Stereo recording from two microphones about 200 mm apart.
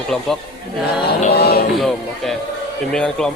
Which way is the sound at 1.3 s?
50° left (ahead or behind).